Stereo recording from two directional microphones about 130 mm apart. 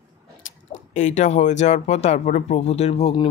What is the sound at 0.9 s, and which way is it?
Speech, 65° left (ahead or behind).